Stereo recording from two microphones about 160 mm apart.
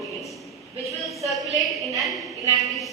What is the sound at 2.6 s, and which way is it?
Speech, centre (ahead or behind).